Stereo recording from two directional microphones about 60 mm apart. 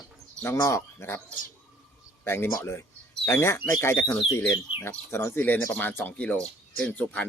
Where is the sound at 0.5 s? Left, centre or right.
Left.